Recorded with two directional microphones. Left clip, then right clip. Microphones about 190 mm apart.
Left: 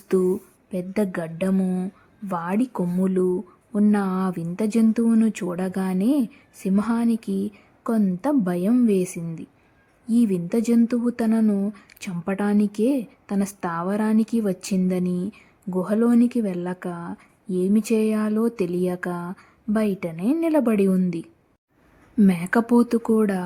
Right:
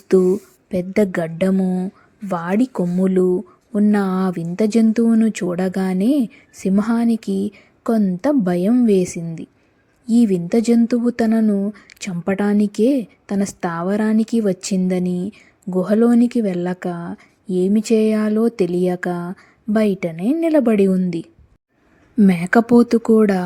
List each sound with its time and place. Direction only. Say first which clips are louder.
0.1 s speech: right 6 dB; 20° right (ahead or behind)
1.5 s a woman's voice: right 5 dB; 10° right (ahead or behind)
22.3 s speech: right 7 dB; 20° right (ahead or behind)